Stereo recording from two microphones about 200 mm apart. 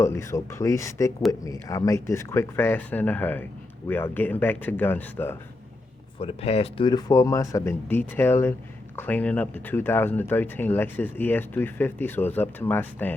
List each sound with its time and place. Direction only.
0.0 s speech: 15° left (ahead or behind)
6.1 s speech: 30° left (ahead or behind); by 13.1 s 10° left (ahead or behind)